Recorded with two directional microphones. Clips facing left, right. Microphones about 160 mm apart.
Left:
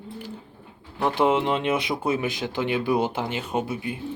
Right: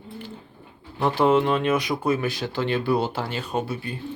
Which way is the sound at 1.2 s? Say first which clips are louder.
Right 2 dB; 20° left (ahead or behind).